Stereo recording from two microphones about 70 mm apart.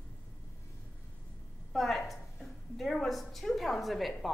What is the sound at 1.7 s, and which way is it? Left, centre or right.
A woman's voice, centre.